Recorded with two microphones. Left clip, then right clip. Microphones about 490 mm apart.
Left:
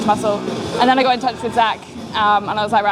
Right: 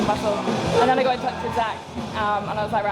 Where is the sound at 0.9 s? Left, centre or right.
Left.